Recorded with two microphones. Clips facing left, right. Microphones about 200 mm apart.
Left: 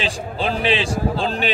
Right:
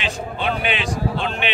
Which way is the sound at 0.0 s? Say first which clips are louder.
Left 1 dB; 30° left (ahead or behind).